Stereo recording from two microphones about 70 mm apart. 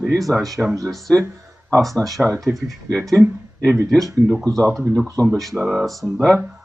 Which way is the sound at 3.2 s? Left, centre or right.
Right.